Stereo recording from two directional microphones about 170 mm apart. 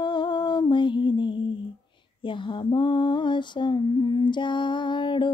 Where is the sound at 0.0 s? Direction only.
25° left (ahead or behind).